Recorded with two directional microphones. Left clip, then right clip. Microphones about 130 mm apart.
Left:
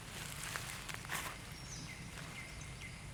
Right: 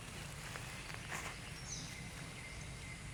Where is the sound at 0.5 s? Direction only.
35° left (ahead or behind).